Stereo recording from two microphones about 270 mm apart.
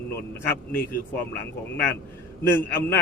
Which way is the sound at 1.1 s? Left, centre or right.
Left.